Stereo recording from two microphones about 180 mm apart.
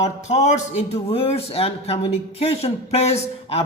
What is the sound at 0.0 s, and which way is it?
A man's voice, 40° left (ahead or behind).